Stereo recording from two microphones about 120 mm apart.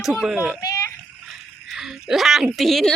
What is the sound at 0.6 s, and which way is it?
Splash, 25° left (ahead or behind).